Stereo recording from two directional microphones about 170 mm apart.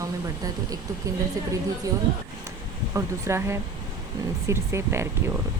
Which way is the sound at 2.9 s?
15° right (ahead or behind).